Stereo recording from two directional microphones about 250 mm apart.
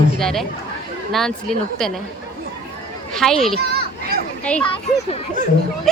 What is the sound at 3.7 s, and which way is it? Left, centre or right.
Children playing, right.